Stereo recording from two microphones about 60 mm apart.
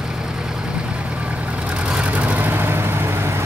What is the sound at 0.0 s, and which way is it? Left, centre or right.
Vehicle, centre.